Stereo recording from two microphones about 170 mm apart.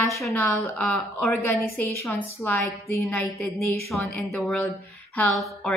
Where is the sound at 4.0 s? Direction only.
Centre (ahead or behind).